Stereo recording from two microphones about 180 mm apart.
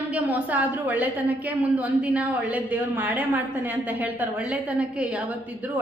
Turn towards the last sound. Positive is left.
turn(degrees=-10)  # may be behind; listen again after turning